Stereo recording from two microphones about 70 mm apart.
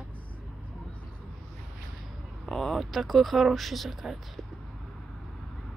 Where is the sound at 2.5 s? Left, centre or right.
Centre.